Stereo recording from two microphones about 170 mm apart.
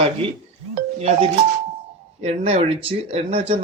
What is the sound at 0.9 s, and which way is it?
Speech, 35° right (ahead or behind).